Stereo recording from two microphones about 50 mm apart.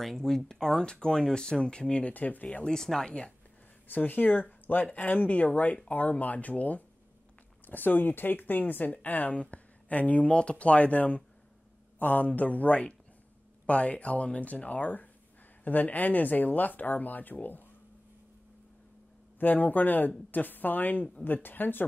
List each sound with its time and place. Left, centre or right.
0.0 s speech: centre
2.1 s speech: left
2.4 s speech: centre
3.1 s speech: left
3.8 s speech: left
19.4 s speech: left